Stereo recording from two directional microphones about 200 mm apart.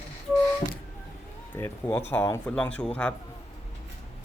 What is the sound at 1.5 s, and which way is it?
Speech, 10° left (ahead or behind).